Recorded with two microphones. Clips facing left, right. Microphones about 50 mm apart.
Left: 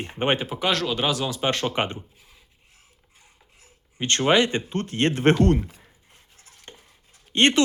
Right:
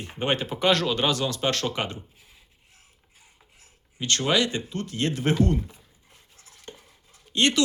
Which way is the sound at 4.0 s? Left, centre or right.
Left.